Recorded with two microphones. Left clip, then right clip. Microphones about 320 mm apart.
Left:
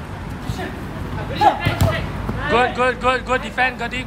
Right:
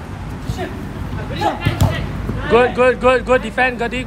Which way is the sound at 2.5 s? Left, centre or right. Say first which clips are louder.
Right 5 dB; centre.